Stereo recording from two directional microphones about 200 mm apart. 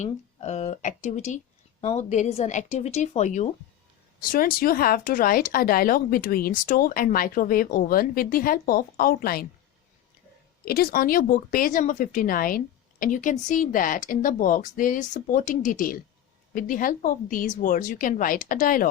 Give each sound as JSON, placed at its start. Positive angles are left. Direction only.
{"t": 0.0, "sound": "a woman's voice", "side_deg": 35}
{"t": 10.7, "sound": "speech", "side_deg": 50}